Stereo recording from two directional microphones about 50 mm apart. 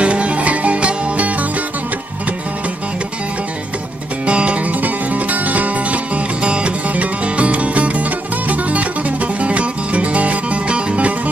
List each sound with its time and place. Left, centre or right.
0.0 s music: right
4.3 s music: right